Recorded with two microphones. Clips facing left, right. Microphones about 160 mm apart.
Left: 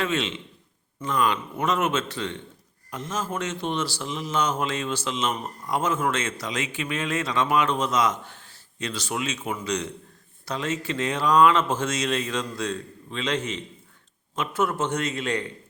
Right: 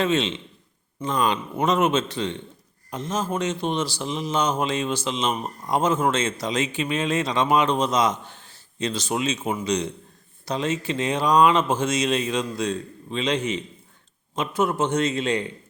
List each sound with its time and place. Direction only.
0.0 s a man's voice: 20° right (ahead or behind)